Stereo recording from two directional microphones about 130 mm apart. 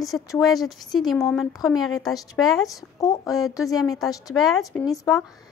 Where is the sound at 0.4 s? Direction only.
Centre (ahead or behind).